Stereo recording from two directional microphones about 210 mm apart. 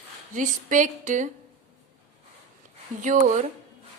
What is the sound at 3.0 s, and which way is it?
Speech, 35° right (ahead or behind).